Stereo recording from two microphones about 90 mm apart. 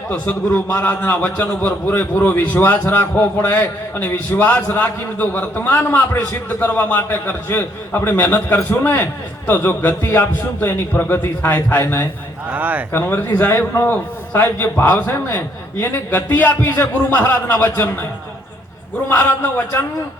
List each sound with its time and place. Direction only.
0.1 s a man's voice: 15° left (ahead or behind)
12.5 s speech: 20° right (ahead or behind)
12.9 s a man's voice: 25° left (ahead or behind)
19.0 s a man's voice: 20° left (ahead or behind)